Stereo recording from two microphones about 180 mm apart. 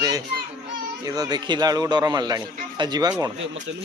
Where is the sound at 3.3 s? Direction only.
90° right.